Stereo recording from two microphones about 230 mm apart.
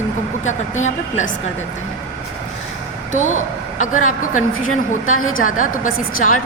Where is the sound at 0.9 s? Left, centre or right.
Left.